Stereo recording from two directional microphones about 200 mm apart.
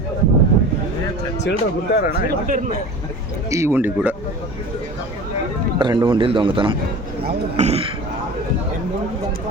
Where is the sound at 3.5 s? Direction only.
10° right (ahead or behind).